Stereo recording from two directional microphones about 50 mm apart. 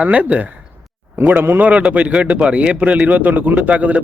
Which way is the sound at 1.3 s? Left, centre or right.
Right.